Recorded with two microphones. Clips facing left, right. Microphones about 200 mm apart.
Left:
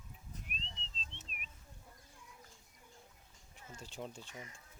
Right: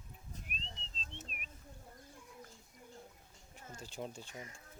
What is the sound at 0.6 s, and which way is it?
Whistling, 40° right (ahead or behind).